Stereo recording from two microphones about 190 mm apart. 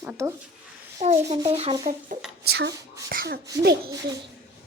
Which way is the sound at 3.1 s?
50° right (ahead or behind).